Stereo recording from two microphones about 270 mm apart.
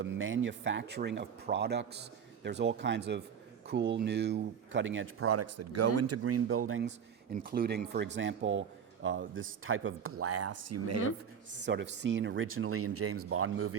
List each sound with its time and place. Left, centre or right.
0.0 s speech: right
7.3 s speech: right
11.6 s speech: right